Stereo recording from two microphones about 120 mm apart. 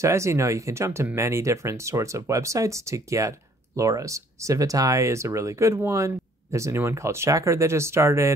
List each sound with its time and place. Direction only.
0.0 s speech: 25° right (ahead or behind)